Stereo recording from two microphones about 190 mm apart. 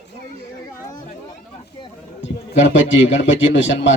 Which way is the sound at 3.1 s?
80° left.